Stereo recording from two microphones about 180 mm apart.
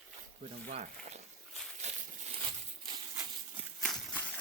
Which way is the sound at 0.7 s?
40° right (ahead or behind).